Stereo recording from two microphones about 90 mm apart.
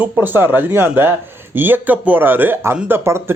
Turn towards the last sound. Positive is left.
turn(degrees=-30)  # may be behind; listen again after turning